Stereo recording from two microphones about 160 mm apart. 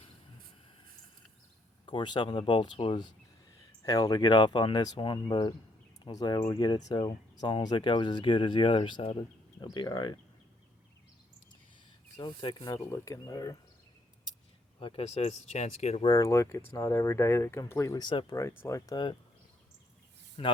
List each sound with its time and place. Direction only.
1.9 s speech: 30° left (ahead or behind)
12.1 s speech: 30° left (ahead or behind)
14.8 s speech: 35° left (ahead or behind)
16.0 s speech: 20° left (ahead or behind)
18.3 s speech: 15° left (ahead or behind)
20.4 s speech: 35° left (ahead or behind)